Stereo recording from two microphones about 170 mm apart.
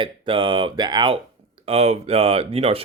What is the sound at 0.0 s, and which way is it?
Speech, 30° right (ahead or behind).